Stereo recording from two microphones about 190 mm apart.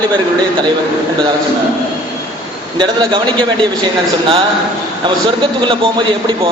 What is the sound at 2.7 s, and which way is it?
Speech, 25° right (ahead or behind).